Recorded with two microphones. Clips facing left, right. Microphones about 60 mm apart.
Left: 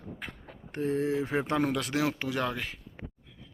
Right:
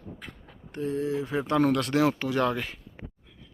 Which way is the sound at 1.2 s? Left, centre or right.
Left.